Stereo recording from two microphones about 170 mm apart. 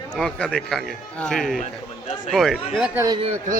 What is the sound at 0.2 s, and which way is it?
Speech, 5° left (ahead or behind).